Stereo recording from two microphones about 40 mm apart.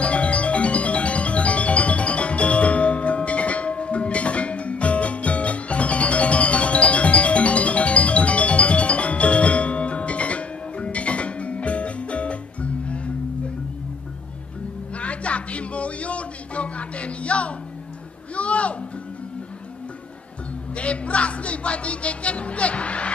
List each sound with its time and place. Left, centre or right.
0.0 s music: left
15.0 s music: left
18.3 s a sound: left
20.7 s music: left